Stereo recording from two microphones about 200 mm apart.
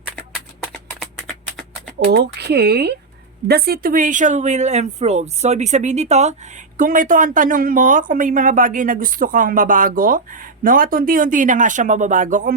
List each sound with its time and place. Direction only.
0.6 s shuffling cards: 5° left (ahead or behind)
2.1 s speech: 55° right (ahead or behind)